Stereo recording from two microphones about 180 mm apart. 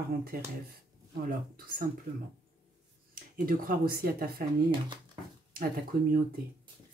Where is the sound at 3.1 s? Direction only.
50° right (ahead or behind).